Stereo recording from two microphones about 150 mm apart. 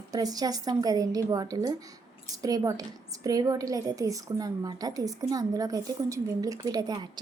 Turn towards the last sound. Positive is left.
turn(degrees=-25)  # may be behind; listen again after turning